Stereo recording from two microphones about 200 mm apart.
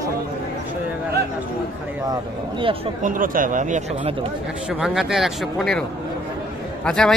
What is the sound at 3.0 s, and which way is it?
Speech, 45° right (ahead or behind).